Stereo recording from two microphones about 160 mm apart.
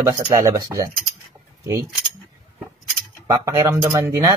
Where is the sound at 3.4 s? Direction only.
20° right (ahead or behind).